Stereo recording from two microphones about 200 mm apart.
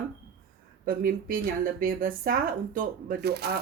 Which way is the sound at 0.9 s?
45° right (ahead or behind).